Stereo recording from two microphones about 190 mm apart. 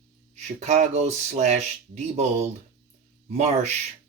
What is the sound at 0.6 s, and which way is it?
Speech, 35° right (ahead or behind).